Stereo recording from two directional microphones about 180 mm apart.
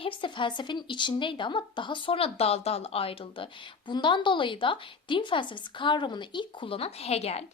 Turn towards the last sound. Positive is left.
turn(degrees=35)  # may be behind; listen again after turning